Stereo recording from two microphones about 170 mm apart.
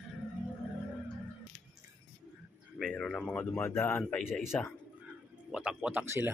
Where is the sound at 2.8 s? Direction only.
5° left (ahead or behind).